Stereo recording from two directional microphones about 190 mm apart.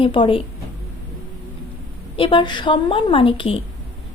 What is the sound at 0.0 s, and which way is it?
Speech, 30° left (ahead or behind).